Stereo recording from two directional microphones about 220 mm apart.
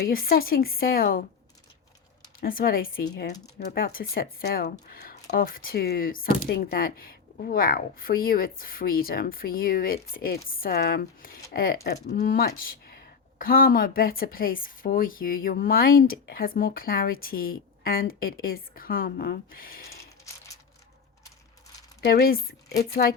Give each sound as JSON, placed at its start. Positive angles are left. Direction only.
{"t": 0.0, "sound": "speech", "side_deg": 40}
{"t": 2.4, "sound": "speech", "side_deg": 40}
{"t": 22.0, "sound": "speech", "side_deg": 45}